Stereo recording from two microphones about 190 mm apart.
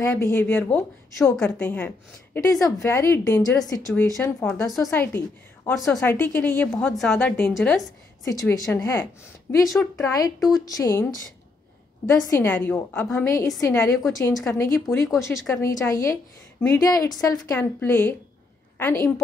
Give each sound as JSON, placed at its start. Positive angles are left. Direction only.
{"t": 0.0, "sound": "speech", "side_deg": 15}
{"t": 8.2, "sound": "speech", "side_deg": 20}
{"t": 12.3, "sound": "speech", "side_deg": 10}